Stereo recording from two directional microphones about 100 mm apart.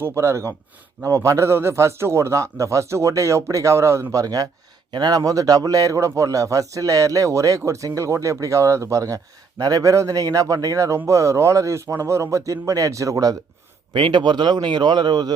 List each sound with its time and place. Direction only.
0.0 s a man's voice: 30° right (ahead or behind)
13.9 s speech: 55° right (ahead or behind)